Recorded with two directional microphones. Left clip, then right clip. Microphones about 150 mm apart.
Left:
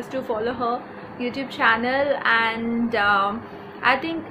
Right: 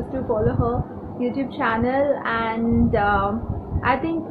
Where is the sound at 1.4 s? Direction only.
15° left (ahead or behind).